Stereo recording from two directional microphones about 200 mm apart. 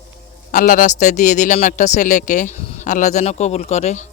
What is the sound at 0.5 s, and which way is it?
A man's voice, 45° left (ahead or behind).